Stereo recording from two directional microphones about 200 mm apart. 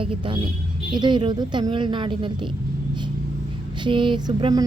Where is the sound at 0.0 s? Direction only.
25° right (ahead or behind).